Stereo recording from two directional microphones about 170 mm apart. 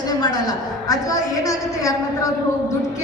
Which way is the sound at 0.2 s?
25° left (ahead or behind).